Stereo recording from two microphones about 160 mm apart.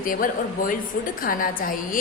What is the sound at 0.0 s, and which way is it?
A woman's voice, 60° left (ahead or behind).